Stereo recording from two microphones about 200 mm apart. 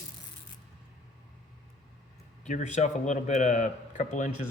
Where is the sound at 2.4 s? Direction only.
35° left (ahead or behind).